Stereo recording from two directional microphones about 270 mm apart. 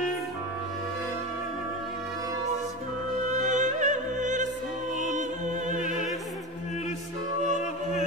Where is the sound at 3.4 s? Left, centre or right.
Right.